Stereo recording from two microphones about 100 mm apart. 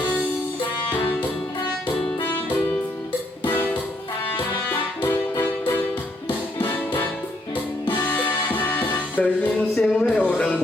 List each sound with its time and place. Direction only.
3.4 s music: 20° left (ahead or behind)
8.0 s music: 20° left (ahead or behind)